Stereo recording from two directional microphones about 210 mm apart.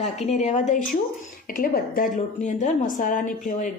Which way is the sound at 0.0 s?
35° left (ahead or behind).